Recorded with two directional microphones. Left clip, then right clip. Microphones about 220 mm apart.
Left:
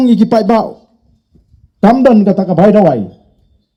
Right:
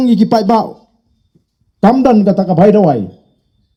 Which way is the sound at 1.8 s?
40° right (ahead or behind).